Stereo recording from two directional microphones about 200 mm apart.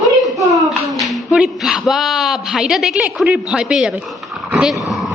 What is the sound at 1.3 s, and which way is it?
A woman's voice, 5° right (ahead or behind).